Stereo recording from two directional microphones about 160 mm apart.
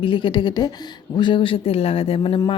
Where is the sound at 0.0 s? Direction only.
30° left (ahead or behind).